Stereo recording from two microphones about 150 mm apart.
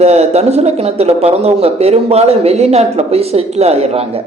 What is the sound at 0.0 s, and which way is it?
Speech, 45° right (ahead or behind).